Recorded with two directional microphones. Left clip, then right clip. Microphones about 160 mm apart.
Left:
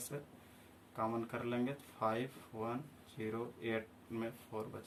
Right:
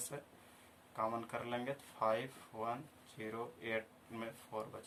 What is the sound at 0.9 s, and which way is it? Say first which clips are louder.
Speech: even; 35° right (ahead or behind).